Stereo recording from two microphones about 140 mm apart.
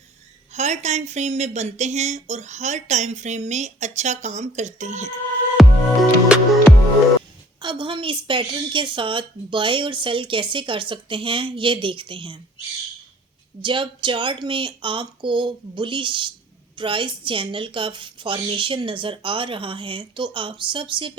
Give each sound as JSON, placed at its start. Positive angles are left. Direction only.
{"t": 0.5, "sound": "speech", "side_deg": -55}
{"t": 5.5, "sound": "music", "side_deg": -5}
{"t": 7.6, "sound": "a woman's voice", "side_deg": -35}
{"t": 13.6, "sound": "a woman's voice", "side_deg": -35}